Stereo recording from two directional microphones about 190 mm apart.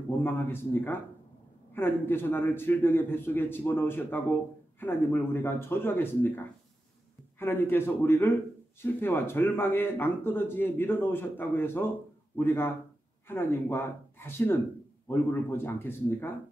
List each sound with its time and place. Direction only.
0.1 s speech: 10° left (ahead or behind)